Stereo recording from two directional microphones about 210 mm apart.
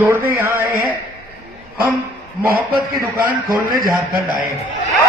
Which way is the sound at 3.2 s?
45° right (ahead or behind).